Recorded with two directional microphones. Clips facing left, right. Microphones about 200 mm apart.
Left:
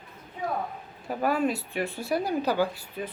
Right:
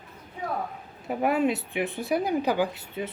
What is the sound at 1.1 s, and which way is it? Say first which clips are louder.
Speech: right 2 dB; 20° right (ahead or behind).